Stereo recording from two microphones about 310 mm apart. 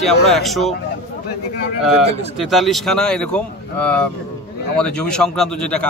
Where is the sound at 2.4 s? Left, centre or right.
Centre.